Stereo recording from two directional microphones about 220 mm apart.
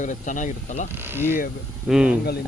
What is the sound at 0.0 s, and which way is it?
Speech, 35° left (ahead or behind).